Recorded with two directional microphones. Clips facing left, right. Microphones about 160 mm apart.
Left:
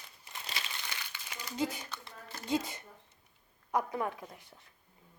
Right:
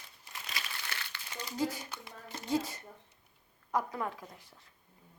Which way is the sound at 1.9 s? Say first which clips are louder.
Right 1 dB; 15° right (ahead or behind).